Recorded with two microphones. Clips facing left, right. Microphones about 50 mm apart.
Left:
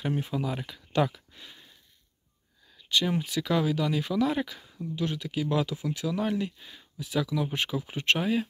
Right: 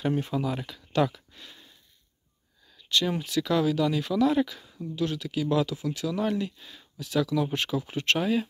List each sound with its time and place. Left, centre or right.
0.0 s speech: centre
1.0 s a sound: centre
2.9 s speech: centre